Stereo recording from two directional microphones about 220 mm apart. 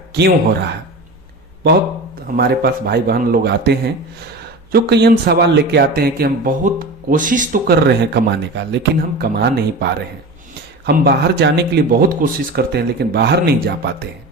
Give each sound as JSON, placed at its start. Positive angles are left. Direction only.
{"t": 0.1, "sound": "speech", "side_deg": -50}
{"t": 2.3, "sound": "speech", "side_deg": -45}